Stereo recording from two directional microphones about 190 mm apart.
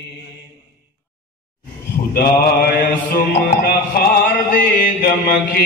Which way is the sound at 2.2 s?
50° left (ahead or behind).